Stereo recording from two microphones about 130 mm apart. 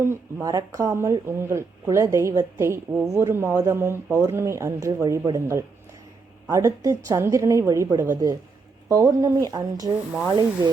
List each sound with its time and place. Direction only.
0.0 s speech: 20° right (ahead or behind)